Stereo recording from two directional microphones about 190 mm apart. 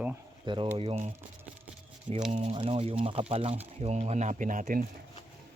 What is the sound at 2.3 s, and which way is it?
Speech, 30° right (ahead or behind).